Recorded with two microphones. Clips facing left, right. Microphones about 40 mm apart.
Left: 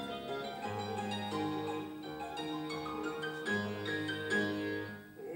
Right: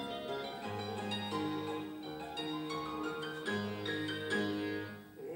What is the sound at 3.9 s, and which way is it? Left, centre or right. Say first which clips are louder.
Music: left 1 dB; centre.